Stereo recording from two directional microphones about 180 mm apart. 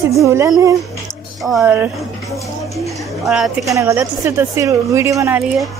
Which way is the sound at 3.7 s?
15° right (ahead or behind).